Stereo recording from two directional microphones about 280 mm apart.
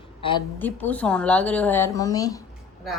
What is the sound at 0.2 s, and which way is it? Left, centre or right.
Speech, centre.